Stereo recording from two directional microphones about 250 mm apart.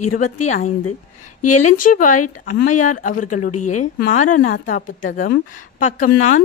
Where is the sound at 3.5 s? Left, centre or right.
Left.